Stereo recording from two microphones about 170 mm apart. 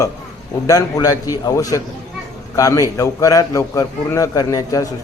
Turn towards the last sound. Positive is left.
turn(degrees=20)  # may be behind; listen again after turning